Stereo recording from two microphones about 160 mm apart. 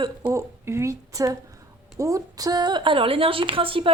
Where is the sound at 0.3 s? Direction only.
15° right (ahead or behind).